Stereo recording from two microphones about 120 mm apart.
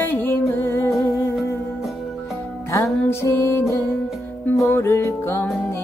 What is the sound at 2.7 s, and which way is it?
Music, 25° left (ahead or behind).